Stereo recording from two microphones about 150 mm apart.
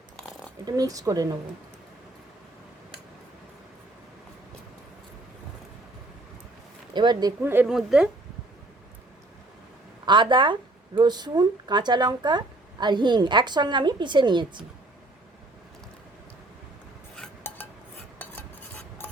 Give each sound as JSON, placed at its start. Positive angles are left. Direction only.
{"t": 0.6, "sound": "speech", "side_deg": -25}
{"t": 6.9, "sound": "speech", "side_deg": -30}
{"t": 7.4, "sound": "a woman's voice", "side_deg": -15}
{"t": 7.7, "sound": "speech", "side_deg": -5}
{"t": 10.1, "sound": "a woman's voice", "side_deg": -30}